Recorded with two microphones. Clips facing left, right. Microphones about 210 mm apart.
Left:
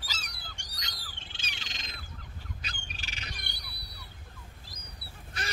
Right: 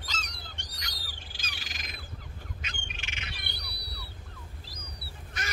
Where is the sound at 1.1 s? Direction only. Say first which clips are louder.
Right 1 dB; 25° left (ahead or behind).